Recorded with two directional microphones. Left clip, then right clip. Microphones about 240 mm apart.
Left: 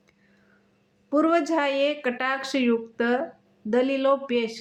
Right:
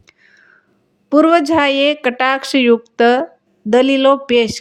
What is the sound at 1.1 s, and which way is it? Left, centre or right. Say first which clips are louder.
Speech: right 11 dB; right.